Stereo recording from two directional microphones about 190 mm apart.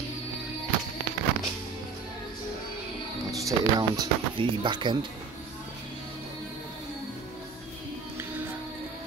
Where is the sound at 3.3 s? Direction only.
20° right (ahead or behind).